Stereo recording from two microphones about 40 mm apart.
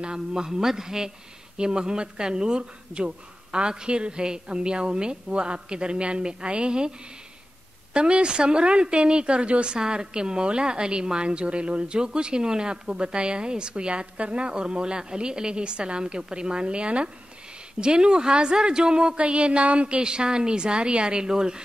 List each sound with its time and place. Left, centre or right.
0.0 s a man's voice: centre
7.9 s a woman's voice: right
20.0 s a woman's voice: right